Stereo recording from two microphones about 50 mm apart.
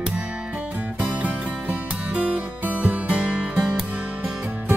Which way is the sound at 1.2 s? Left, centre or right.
Right.